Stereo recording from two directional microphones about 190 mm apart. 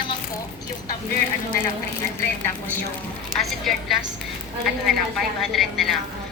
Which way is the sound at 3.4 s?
Centre (ahead or behind).